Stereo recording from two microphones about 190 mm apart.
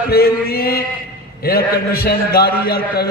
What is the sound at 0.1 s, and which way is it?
A man's voice, 55° left (ahead or behind).